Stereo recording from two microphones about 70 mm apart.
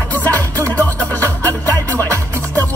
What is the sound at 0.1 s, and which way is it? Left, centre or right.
Music, left.